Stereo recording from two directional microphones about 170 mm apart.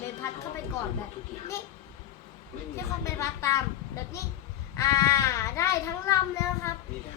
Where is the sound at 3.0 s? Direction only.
15° left (ahead or behind).